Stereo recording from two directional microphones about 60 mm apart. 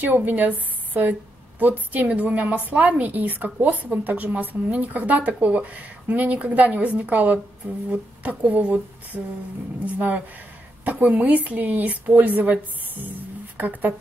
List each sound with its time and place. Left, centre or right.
0.0 s a woman's voice: right
13.6 s a woman's voice: right